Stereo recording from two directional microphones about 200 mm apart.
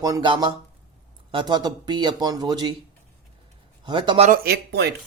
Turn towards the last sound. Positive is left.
turn(degrees=-55)  # may be behind; listen again after turning